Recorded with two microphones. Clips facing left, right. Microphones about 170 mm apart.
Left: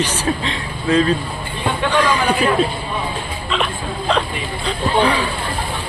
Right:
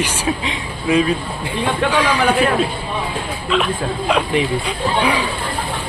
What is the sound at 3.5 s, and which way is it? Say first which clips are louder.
Speech: right 4 dB; centre (ahead or behind).